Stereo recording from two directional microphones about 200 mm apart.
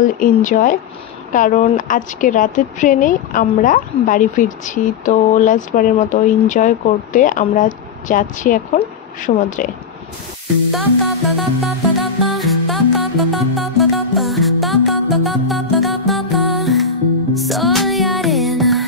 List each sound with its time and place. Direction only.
0.2 s a woman's voice: 40° left (ahead or behind)
11.6 s music: centre (ahead or behind)